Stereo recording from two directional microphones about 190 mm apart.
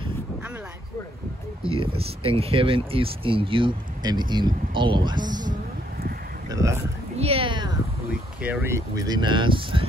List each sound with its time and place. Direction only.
1.7 s speech: 30° right (ahead or behind)
6.5 s speech: 15° right (ahead or behind)
7.2 s speech: 30° right (ahead or behind)
8.4 s speech: 10° right (ahead or behind); by 9.8 s 25° right (ahead or behind)